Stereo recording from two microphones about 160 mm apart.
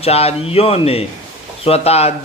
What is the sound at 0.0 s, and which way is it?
Speech, 40° left (ahead or behind).